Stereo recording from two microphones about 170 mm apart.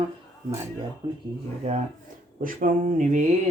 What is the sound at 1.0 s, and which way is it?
Speech, 30° right (ahead or behind).